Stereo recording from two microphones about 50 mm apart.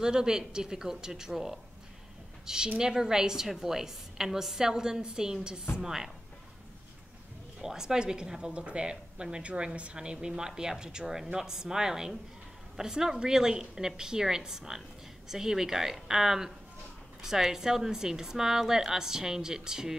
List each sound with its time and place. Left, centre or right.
0.0 s a woman's voice: centre
7.6 s speech: centre